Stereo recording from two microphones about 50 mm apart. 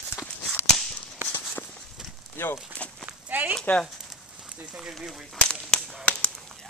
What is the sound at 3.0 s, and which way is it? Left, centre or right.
Clip-clop, right.